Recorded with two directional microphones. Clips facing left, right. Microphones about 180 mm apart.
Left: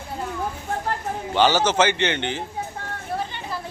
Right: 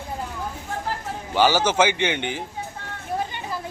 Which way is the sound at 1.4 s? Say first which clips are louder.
Even; 10° right (ahead or behind).